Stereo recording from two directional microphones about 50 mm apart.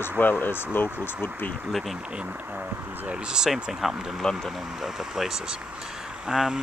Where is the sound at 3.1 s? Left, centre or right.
Centre.